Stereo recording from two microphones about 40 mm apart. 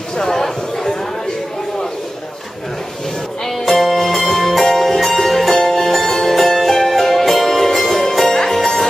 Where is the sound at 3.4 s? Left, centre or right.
Centre.